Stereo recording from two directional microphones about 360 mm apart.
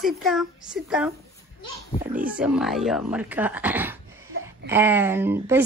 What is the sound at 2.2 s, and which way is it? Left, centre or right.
A woman's voice, centre.